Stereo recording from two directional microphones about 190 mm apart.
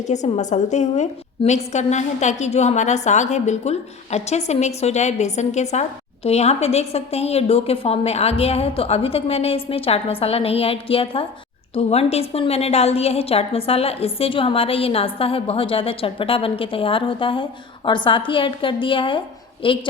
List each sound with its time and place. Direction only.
0.1 s a woman's voice: 40° left (ahead or behind)